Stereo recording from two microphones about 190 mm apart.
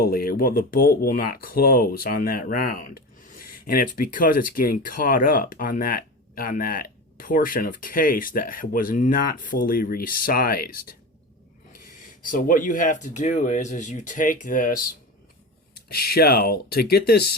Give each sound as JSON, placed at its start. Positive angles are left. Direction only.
{"t": 0.0, "sound": "speech", "side_deg": 50}
{"t": 12.2, "sound": "speech", "side_deg": 45}